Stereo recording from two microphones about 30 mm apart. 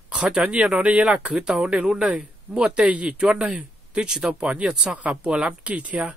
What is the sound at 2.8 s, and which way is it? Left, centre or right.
Speech, right.